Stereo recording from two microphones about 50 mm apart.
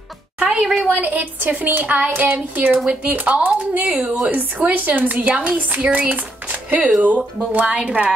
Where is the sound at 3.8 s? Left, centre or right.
Right.